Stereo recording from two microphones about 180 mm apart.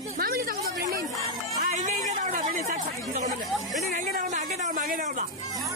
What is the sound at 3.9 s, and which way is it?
A man's voice, 45° right (ahead or behind).